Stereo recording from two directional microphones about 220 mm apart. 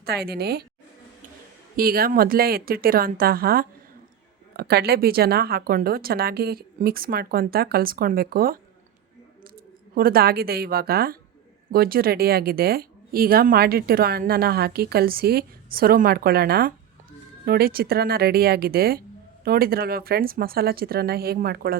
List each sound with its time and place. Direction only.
0.0 s a woman's voice: 45° right (ahead or behind)
1.7 s a woman's voice: 40° right (ahead or behind)
9.9 s a woman's voice: 40° right (ahead or behind)